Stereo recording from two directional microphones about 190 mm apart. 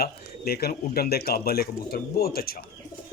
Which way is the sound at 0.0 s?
55° left (ahead or behind).